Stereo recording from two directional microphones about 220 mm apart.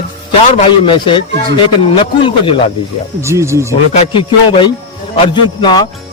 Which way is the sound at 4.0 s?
25° left (ahead or behind).